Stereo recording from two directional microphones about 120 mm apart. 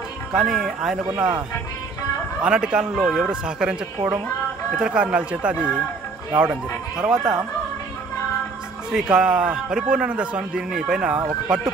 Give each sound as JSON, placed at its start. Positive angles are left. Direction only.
{"t": 0.3, "sound": "speech", "side_deg": -5}
{"t": 1.1, "sound": "speech", "side_deg": -35}
{"t": 2.4, "sound": "speech", "side_deg": -10}
{"t": 7.0, "sound": "speech", "side_deg": -5}
{"t": 8.9, "sound": "speech", "side_deg": -5}